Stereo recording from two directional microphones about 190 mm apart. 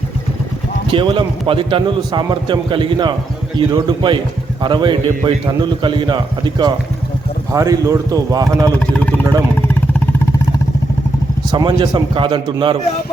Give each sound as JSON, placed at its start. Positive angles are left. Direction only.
{"t": 0.9, "sound": "a man's voice", "side_deg": -25}
{"t": 8.9, "sound": "vehicle", "side_deg": 5}
{"t": 11.5, "sound": "a man's voice", "side_deg": -25}